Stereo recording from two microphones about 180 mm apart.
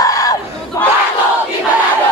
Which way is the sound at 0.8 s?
20° left (ahead or behind).